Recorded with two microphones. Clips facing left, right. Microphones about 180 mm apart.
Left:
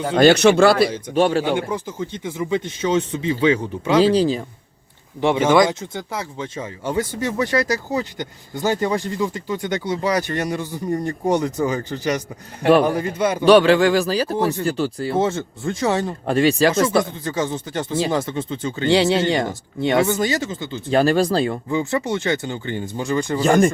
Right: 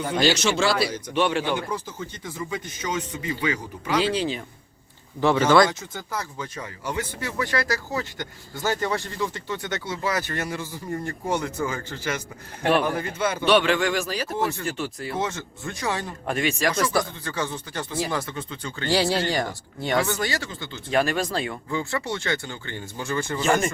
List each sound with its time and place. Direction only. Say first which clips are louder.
0.2 s a man's voice: left 10 dB; 60° left (ahead or behind)
1.1 s speech: left 4 dB; 40° left (ahead or behind)
2.0 s speech: left 7 dB; 20° left (ahead or behind)
4.0 s speech: left 8 dB; 40° left (ahead or behind)
5.2 s speech: left 2 dB; 20° left (ahead or behind)
13.4 s speech: left 8 dB; 40° left (ahead or behind); by 20.8 s 20° left (ahead or behind)
20.9 s speech: left 7 dB; 30° left (ahead or behind)
21.7 s speech: left 6 dB; 20° left (ahead or behind)
23.3 s speech: left 5 dB; 35° left (ahead or behind)